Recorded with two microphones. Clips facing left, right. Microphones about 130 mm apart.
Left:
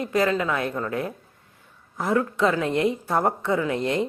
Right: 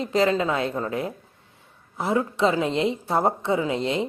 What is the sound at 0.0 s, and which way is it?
A woman's voice, 25° right (ahead or behind).